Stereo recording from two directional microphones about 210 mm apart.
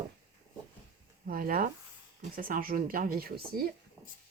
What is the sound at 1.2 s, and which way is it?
Speech, 45° right (ahead or behind).